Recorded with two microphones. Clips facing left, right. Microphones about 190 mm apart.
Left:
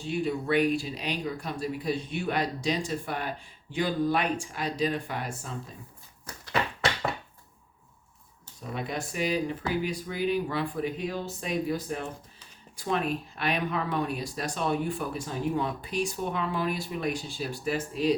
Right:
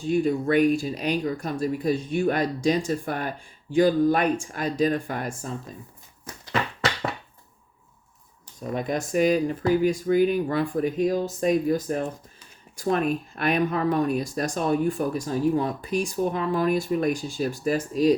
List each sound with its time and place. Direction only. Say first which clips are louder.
0.0 s speech: right 7 dB; 45° right (ahead or behind)
8.7 s speech: right 8 dB; 45° right (ahead or behind)